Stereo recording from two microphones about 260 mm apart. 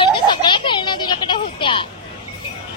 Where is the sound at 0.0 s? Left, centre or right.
Centre.